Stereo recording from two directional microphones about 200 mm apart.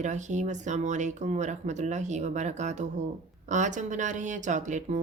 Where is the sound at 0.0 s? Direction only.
35° right (ahead or behind).